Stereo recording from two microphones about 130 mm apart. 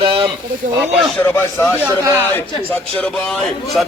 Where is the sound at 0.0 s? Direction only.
40° right (ahead or behind).